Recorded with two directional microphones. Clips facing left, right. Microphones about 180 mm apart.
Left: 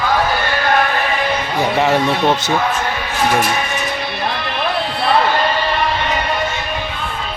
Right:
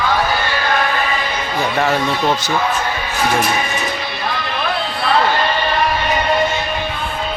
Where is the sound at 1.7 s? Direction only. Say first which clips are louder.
Left 2 dB; 20° left (ahead or behind).